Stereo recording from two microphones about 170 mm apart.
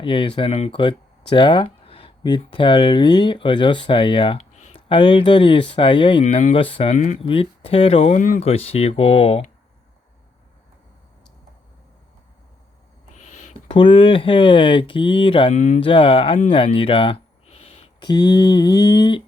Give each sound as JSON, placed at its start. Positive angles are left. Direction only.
{"t": 0.0, "sound": "speech", "side_deg": 30}
{"t": 1.3, "sound": "a sound", "side_deg": 30}
{"t": 2.5, "sound": "speech", "side_deg": 30}
{"t": 4.5, "sound": "a sound", "side_deg": 45}
{"t": 4.9, "sound": "speech", "side_deg": 30}
{"t": 6.2, "sound": "speech", "side_deg": 40}
{"t": 6.9, "sound": "speech", "side_deg": 45}
{"t": 13.1, "sound": "speech", "side_deg": 45}
{"t": 15.5, "sound": "speech", "side_deg": 45}
{"t": 15.8, "sound": "speech", "side_deg": 30}